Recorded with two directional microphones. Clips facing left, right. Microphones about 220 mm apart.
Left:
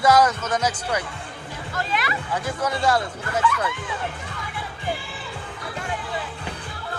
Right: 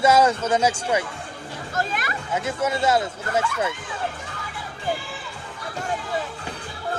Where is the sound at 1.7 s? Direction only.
45° right (ahead or behind).